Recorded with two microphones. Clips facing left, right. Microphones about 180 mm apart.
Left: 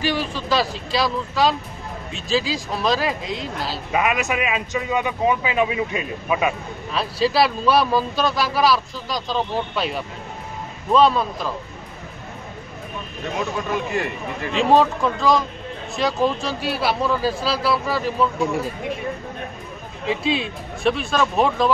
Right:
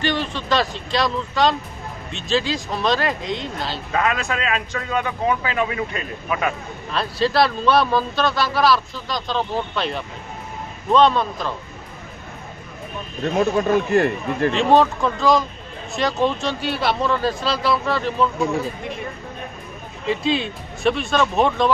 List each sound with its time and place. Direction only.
0.0 s speech: 5° left (ahead or behind)
3.9 s a man's voice: 15° left (ahead or behind)
6.9 s speech: 5° left (ahead or behind)
13.4 s speech: 50° right (ahead or behind)
14.5 s speech: centre (ahead or behind)
20.1 s speech: centre (ahead or behind)